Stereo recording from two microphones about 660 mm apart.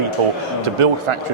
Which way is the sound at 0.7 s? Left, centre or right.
Right.